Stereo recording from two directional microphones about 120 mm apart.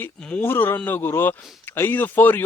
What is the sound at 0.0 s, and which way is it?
Speech, 15° left (ahead or behind).